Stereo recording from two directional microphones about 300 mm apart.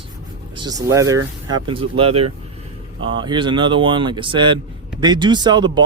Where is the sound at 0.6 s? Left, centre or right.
Centre.